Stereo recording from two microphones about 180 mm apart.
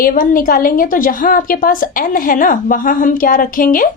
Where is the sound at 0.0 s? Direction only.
50° left (ahead or behind).